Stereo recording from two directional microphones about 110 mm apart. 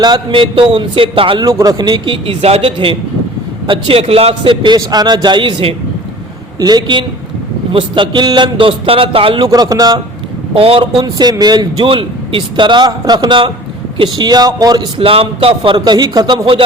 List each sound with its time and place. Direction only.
0.0 s speech: 50° right (ahead or behind)
1.5 s a man's voice: 35° right (ahead or behind); by 4.5 s 65° right (ahead or behind)
4.8 s a man's voice: 40° right (ahead or behind)
6.6 s a man's voice: 40° right (ahead or behind); by 9.5 s 55° right (ahead or behind)
9.5 s a man's voice: 35° right (ahead or behind)
10.5 s a man's voice: 60° right (ahead or behind)
11.0 s a man's voice: 35° right (ahead or behind)
14.9 s speech: 60° right (ahead or behind)